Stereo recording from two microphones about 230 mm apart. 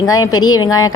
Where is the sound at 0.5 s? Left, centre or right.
Centre.